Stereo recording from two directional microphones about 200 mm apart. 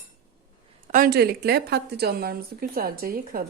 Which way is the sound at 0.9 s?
50° right (ahead or behind).